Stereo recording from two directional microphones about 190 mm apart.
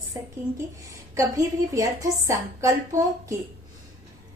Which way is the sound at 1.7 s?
15° right (ahead or behind).